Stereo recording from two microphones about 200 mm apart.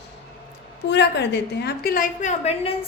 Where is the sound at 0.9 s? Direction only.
60° left (ahead or behind).